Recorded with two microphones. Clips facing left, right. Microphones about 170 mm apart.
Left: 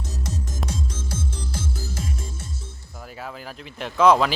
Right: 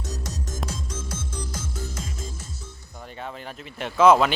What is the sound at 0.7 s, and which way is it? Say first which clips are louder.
Music: left 2 dB; 30° left (ahead or behind).